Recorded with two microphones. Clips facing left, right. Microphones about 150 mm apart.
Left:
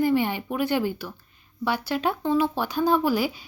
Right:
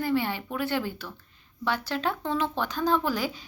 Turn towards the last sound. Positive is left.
turn(degrees=10)  # may be behind; listen again after turning